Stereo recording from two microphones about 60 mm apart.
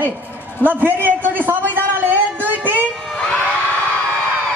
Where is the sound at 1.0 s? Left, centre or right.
Right.